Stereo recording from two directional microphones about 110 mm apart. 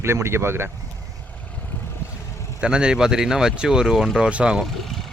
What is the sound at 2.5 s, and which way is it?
Speech, 10° right (ahead or behind).